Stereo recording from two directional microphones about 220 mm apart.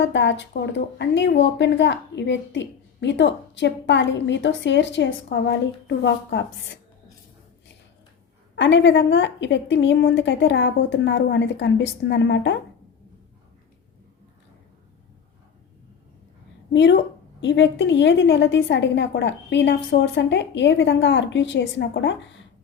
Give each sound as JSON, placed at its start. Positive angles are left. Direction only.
{"t": 0.0, "sound": "speech", "side_deg": 55}
{"t": 8.5, "sound": "a woman's voice", "side_deg": 55}
{"t": 16.7, "sound": "a woman's voice", "side_deg": 55}